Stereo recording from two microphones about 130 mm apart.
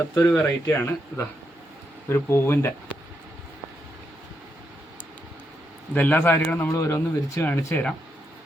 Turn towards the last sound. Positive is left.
turn(degrees=20)  # may be behind; listen again after turning